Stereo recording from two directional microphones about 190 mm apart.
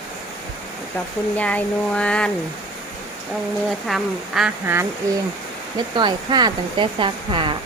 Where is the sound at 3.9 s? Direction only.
Centre (ahead or behind).